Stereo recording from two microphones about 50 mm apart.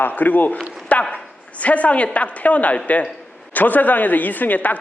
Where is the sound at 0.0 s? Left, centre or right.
Left.